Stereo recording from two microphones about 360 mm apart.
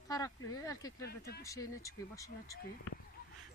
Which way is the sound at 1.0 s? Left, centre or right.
Left.